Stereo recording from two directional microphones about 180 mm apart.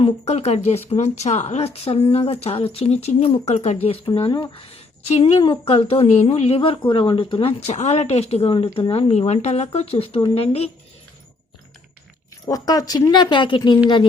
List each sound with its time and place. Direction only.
0.0 s a woman's voice: 35° left (ahead or behind)
12.5 s speech: 20° left (ahead or behind)